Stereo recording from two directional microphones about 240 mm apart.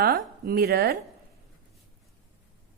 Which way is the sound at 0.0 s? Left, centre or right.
Right.